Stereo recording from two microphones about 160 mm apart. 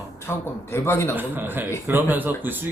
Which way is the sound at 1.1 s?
10° right (ahead or behind).